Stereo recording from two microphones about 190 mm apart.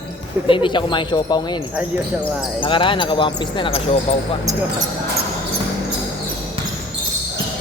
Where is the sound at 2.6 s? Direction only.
25° left (ahead or behind).